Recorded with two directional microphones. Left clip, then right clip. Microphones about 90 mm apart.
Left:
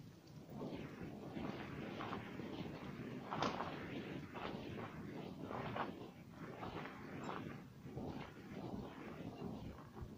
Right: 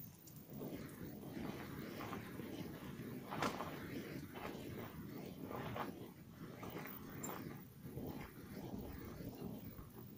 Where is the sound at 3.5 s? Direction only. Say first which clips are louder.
Left 2 dB; 25° left (ahead or behind).